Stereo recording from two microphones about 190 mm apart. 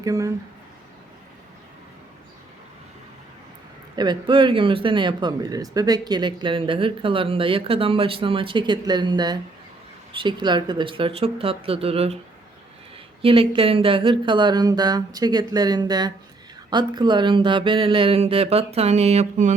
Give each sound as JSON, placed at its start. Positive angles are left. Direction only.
{"t": 0.0, "sound": "speech", "side_deg": -15}
{"t": 3.9, "sound": "speech", "side_deg": -25}
{"t": 13.2, "sound": "speech", "side_deg": -30}